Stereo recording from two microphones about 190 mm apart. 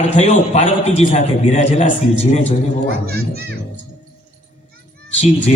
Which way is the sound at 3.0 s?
55° right (ahead or behind).